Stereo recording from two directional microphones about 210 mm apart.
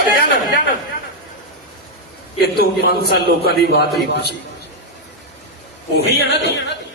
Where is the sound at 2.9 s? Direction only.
50° left (ahead or behind).